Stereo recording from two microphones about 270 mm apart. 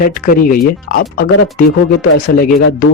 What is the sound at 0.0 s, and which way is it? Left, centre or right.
Speech, left.